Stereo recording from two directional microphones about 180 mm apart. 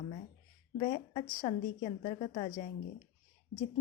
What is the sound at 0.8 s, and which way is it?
A woman's voice, 25° left (ahead or behind).